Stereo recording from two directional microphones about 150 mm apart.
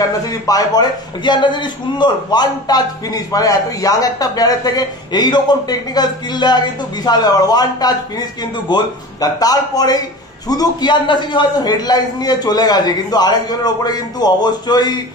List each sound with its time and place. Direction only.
0.3 s a man's voice: 25° left (ahead or behind)